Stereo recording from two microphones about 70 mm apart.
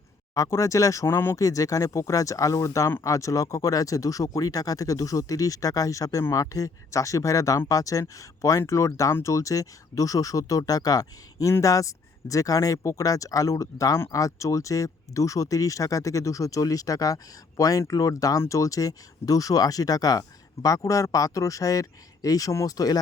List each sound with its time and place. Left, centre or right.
0.3 s speech: left
1.4 s speech: left